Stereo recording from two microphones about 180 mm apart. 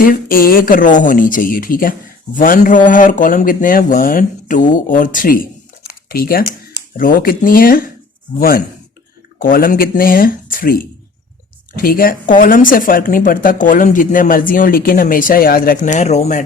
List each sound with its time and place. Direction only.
0.0 s speech: 50° left (ahead or behind)
5.9 s a sound: 55° left (ahead or behind)
6.9 s speech: 50° left (ahead or behind)
11.8 s speech: 55° left (ahead or behind)